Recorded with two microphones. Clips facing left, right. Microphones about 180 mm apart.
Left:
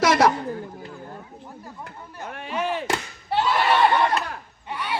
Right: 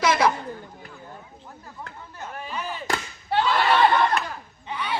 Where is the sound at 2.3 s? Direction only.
70° left (ahead or behind).